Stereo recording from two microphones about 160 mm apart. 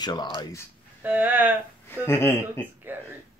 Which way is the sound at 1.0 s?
10° right (ahead or behind).